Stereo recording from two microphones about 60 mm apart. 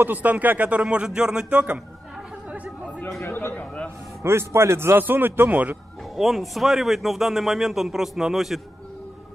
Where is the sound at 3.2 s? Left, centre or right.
Left.